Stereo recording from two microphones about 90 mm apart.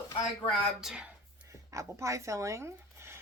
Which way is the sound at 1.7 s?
35° right (ahead or behind).